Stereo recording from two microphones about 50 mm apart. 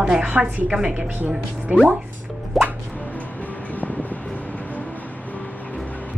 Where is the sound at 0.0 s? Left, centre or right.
Right.